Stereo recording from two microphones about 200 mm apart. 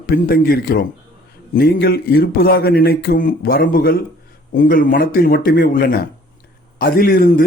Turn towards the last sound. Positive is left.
turn(degrees=45)  # may be behind; listen again after turning